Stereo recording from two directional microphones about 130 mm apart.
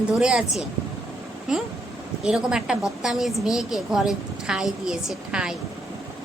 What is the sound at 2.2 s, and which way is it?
A woman's voice, 5° right (ahead or behind).